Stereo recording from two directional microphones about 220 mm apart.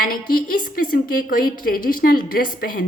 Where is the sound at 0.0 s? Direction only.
40° left (ahead or behind).